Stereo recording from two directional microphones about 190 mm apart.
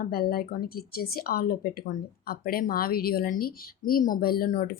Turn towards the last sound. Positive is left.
turn(degrees=50)  # may be behind; listen again after turning